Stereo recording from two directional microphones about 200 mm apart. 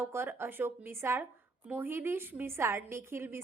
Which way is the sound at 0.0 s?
10° right (ahead or behind).